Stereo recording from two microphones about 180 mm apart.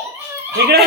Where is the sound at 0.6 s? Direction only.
65° right (ahead or behind).